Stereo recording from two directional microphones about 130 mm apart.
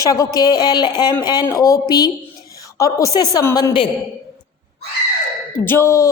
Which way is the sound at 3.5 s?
35° left (ahead or behind).